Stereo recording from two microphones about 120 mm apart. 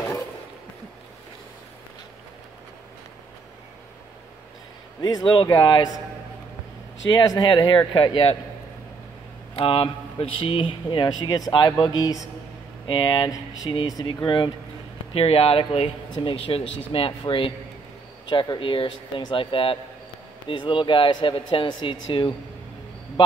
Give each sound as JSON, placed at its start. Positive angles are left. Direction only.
{"t": 5.0, "sound": "speech", "side_deg": 40}
{"t": 7.1, "sound": "speech", "side_deg": 40}
{"t": 9.6, "sound": "speech", "side_deg": 50}
{"t": 15.1, "sound": "speech", "side_deg": 55}